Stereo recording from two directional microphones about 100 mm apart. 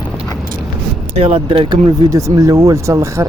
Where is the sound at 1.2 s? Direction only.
65° right (ahead or behind).